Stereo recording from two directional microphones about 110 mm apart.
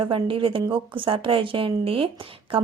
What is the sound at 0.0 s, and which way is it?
A woman's voice, 50° right (ahead or behind).